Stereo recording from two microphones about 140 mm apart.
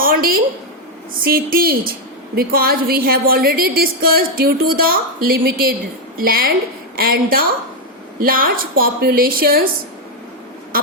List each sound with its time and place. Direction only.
0.0 s a woman's voice: 90° right